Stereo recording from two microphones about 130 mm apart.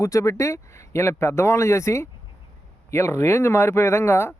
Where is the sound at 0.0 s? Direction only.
25° left (ahead or behind).